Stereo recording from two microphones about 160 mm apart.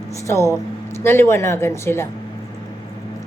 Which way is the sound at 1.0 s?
15° left (ahead or behind).